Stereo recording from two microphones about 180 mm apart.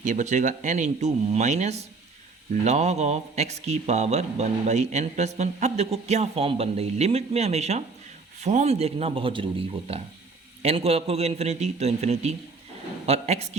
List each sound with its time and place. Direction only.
0.0 s speech: 45° right (ahead or behind)